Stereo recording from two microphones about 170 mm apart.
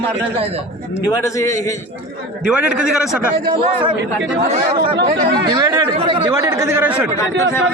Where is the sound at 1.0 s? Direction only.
20° left (ahead or behind).